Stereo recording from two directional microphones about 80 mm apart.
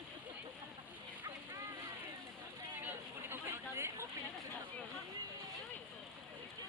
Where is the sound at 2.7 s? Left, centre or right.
Right.